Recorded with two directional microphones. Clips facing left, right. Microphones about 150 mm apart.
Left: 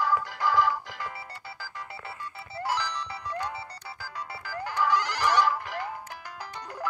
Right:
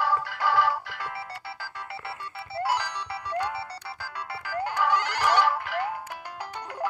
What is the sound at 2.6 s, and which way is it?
Music, 65° right (ahead or behind).